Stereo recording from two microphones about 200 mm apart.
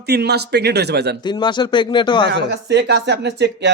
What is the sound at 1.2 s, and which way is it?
Speech, 20° left (ahead or behind).